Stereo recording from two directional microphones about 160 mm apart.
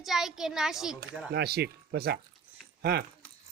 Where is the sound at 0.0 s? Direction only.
Centre (ahead or behind).